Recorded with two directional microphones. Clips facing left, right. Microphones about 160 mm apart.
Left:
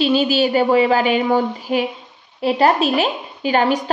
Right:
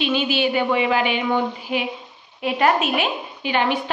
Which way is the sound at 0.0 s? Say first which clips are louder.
Left 5 dB; 40° left (ahead or behind).